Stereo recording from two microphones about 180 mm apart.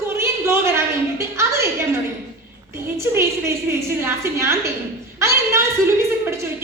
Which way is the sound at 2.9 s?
15° right (ahead or behind).